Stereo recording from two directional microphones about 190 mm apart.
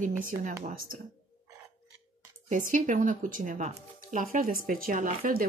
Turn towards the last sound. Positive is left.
turn(degrees=-45)  # may be behind; listen again after turning